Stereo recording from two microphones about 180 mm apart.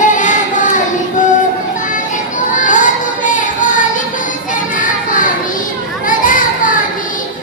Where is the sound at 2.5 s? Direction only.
45° left (ahead or behind).